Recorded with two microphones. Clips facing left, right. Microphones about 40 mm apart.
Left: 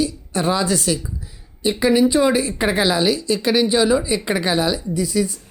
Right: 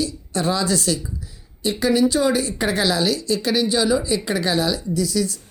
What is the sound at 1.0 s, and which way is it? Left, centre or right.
Speech, centre.